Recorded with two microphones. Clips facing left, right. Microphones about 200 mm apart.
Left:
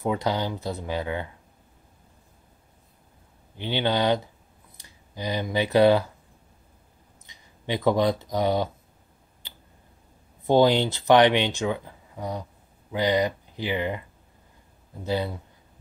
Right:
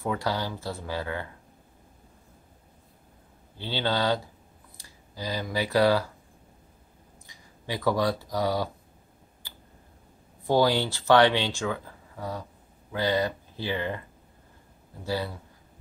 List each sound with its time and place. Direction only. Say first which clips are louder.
0.0 s speech: left 3 dB; 20° left (ahead or behind)
3.5 s speech: left 3 dB; 15° left (ahead or behind)
7.2 s speech: left 5 dB; 20° left (ahead or behind)
10.4 s speech: left 4 dB; 20° left (ahead or behind)
15.0 s speech: left 3 dB; 20° left (ahead or behind)